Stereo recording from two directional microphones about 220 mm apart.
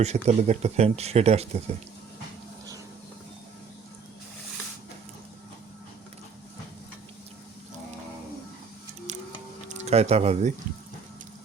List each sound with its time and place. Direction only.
0.0 s speech: 30° right (ahead or behind)
9.1 s a sound: 30° right (ahead or behind)
9.6 s speech: 30° right (ahead or behind)